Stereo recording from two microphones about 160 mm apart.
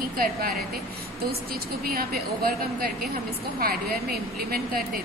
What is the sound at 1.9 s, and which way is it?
Speech, 70° right (ahead or behind).